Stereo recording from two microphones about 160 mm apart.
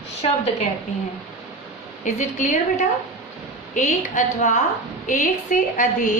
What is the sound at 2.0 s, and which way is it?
A woman's voice, 50° left (ahead or behind).